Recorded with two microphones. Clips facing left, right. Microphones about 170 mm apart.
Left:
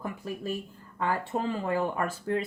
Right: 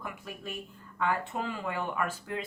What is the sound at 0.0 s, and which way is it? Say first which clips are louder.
A woman's voice: left 6 dB; 35° left (ahead or behind).